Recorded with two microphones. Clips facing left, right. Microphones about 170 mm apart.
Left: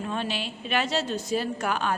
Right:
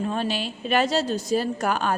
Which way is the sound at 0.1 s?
40° right (ahead or behind).